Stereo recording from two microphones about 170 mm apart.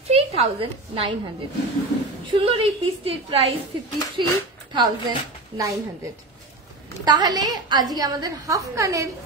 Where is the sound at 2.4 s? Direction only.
35° right (ahead or behind).